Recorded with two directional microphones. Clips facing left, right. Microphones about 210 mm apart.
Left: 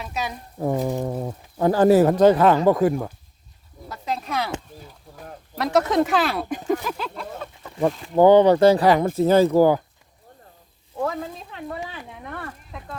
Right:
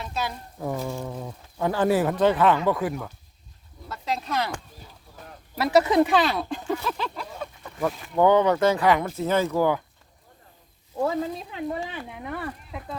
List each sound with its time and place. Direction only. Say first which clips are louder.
0.6 s speech: left 6 dB; 35° left (ahead or behind)
3.8 s speech: left 1 dB; 10° left (ahead or behind)
5.5 s speech: right 1 dB; 5° right (ahead or behind)
6.5 s a sound: left 4 dB; 15° left (ahead or behind)
7.8 s speech: left 5 dB; 30° left (ahead or behind)
11.9 s a sound: right 2 dB; 5° right (ahead or behind)